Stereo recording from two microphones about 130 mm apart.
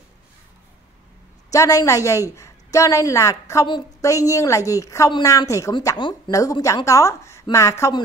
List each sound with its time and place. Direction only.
1.5 s a woman's voice: 25° left (ahead or behind)
5.9 s speech: 40° left (ahead or behind)
6.3 s a woman's voice: 25° left (ahead or behind)